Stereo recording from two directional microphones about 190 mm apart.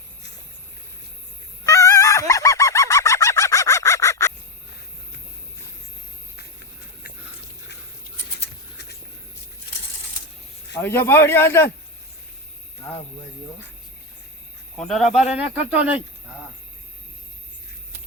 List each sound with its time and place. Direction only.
1.6 s fowl: 15° left (ahead or behind)
10.8 s speech: 10° left (ahead or behind)
14.8 s speech: centre (ahead or behind)